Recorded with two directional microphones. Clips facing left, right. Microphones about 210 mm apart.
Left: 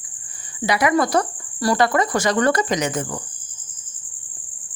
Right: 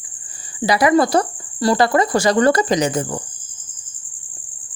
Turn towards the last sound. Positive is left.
turn(degrees=-35)  # may be behind; listen again after turning